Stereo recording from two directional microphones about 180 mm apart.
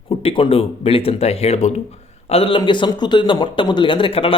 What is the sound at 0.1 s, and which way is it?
A man's voice, 30° left (ahead or behind).